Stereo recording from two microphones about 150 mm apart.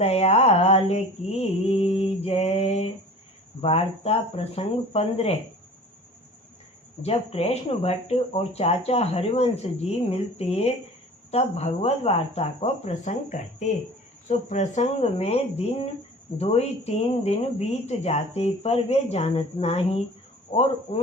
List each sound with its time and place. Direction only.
0.0 s mantra: 45° left (ahead or behind)
3.6 s speech: 40° left (ahead or behind)
7.0 s speech: 45° left (ahead or behind)